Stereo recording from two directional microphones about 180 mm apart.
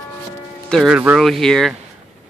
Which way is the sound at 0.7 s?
Centre (ahead or behind).